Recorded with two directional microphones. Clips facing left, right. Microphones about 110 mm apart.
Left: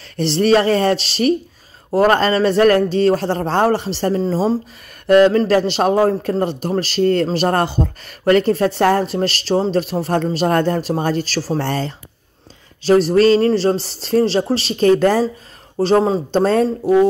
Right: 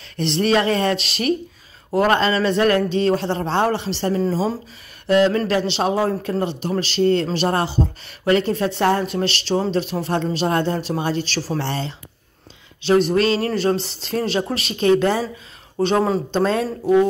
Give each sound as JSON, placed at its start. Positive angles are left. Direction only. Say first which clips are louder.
{"t": 0.2, "sound": "a man's voice", "louder": "left 4 dB", "side_deg": 35}
{"t": 5.0, "sound": "a sound", "louder": "left 5 dB", "side_deg": 50}
{"t": 5.5, "sound": "a woman's voice", "louder": "left 5 dB", "side_deg": 45}